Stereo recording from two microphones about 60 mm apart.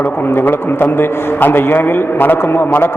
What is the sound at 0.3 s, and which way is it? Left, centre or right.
A man's voice, left.